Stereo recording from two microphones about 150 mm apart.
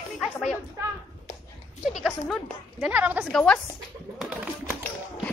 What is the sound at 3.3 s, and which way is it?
Speech, 5° left (ahead or behind).